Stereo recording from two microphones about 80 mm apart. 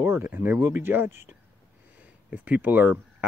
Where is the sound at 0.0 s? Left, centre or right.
Right.